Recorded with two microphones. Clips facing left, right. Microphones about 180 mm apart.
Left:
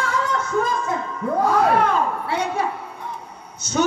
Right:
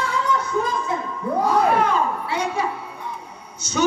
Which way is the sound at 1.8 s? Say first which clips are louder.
Even; 55° left (ahead or behind).